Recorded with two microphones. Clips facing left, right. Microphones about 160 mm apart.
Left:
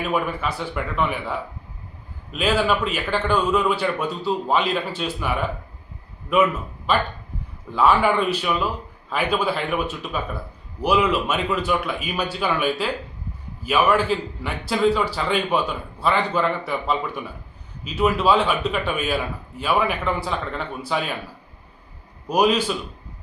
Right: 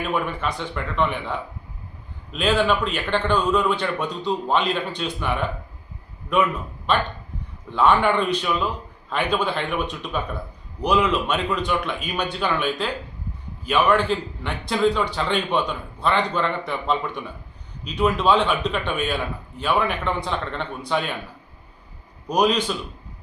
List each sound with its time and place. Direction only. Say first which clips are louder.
0.0 s a man's voice: left 1 dB; 5° left (ahead or behind)
22.3 s speech: left 1 dB; 5° left (ahead or behind)